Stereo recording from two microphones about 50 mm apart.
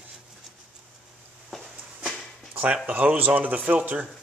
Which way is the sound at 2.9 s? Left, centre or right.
Right.